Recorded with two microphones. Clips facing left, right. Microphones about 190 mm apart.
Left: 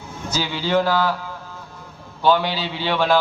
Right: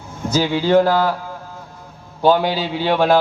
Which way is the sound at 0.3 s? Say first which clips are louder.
Right 7 dB; 50° right (ahead or behind).